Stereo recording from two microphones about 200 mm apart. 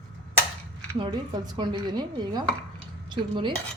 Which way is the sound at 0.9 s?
20° right (ahead or behind).